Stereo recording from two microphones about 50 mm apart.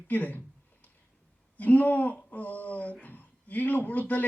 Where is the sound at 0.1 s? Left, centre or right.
Left.